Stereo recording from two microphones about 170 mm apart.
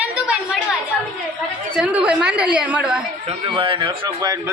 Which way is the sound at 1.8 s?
5° right (ahead or behind).